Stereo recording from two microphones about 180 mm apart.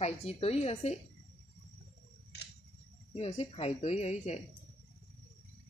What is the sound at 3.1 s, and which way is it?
Speech, 30° left (ahead or behind).